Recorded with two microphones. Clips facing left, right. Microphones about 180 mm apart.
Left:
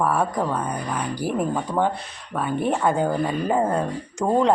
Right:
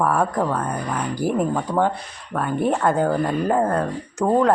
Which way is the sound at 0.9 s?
10° left (ahead or behind).